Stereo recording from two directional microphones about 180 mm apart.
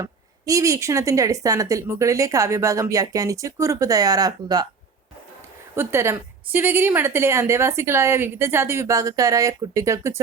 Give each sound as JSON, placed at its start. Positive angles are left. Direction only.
{"t": 0.0, "sound": "speech", "side_deg": -20}
{"t": 5.7, "sound": "speech", "side_deg": -15}